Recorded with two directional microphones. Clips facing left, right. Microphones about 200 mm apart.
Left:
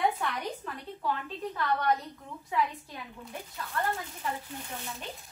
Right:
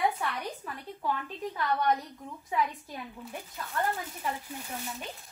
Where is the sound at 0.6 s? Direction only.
10° right (ahead or behind).